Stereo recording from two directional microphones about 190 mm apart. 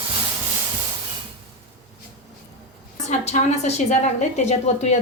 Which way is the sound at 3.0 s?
35° left (ahead or behind).